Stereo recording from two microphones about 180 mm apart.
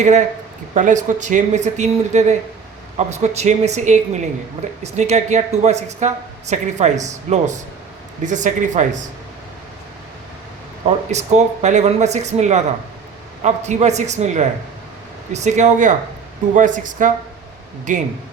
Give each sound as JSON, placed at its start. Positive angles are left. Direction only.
{"t": 0.7, "sound": "speech", "side_deg": -45}
{"t": 10.8, "sound": "speech", "side_deg": -40}